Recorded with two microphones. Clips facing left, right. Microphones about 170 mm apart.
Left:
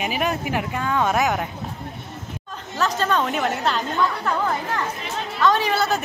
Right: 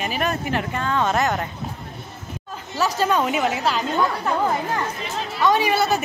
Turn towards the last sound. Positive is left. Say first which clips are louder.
# right 1 dB
turn(degrees=-15)  # may be behind; listen again after turning